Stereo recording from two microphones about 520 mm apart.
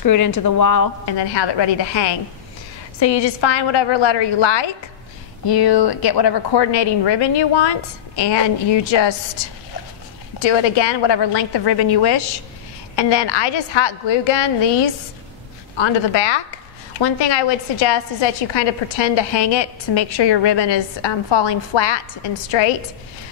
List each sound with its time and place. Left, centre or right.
0.0 s speech: left
1.1 s a woman's voice: left
5.5 s a woman's voice: left
10.4 s a woman's voice: left
15.8 s a woman's voice: left